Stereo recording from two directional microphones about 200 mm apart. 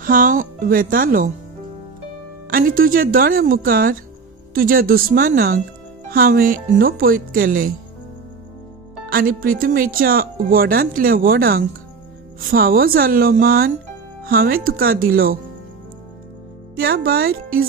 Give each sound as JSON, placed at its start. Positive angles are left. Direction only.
{"t": 0.0, "sound": "speech", "side_deg": -45}
{"t": 2.5, "sound": "speech", "side_deg": -45}
{"t": 9.1, "sound": "speech", "side_deg": -45}
{"t": 16.7, "sound": "speech", "side_deg": -50}